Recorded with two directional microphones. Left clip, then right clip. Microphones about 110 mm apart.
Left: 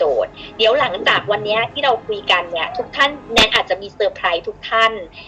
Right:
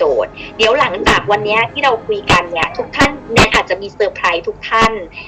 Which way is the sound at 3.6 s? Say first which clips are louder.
Right 3 dB; 45° right (ahead or behind).